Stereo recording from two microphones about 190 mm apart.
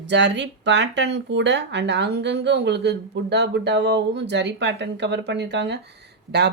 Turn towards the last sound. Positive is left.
turn(degrees=-60)  # may be behind; listen again after turning